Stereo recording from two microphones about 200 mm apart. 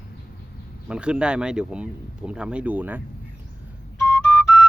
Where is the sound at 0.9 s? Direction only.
5° right (ahead or behind).